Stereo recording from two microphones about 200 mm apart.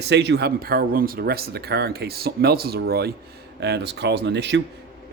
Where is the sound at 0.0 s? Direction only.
60° right (ahead or behind).